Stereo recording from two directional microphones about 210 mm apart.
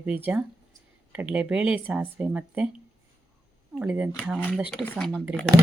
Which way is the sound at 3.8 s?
5° right (ahead or behind).